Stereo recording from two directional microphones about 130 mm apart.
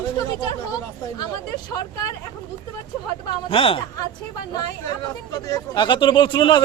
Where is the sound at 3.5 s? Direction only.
45° left (ahead or behind).